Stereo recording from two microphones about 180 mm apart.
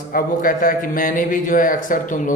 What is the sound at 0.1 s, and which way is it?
Speech, 50° left (ahead or behind).